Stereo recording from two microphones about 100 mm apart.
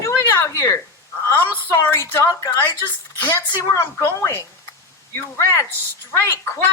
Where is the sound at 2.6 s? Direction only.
20° left (ahead or behind).